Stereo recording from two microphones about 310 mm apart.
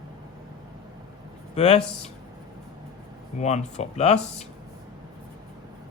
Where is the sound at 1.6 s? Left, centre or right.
Left.